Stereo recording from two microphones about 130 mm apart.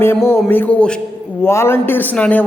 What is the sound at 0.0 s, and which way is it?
A man's voice, 15° left (ahead or behind).